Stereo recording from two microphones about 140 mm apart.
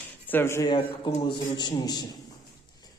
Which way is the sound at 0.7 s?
30° left (ahead or behind).